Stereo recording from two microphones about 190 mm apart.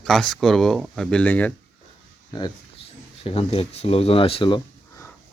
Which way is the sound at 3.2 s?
30° left (ahead or behind).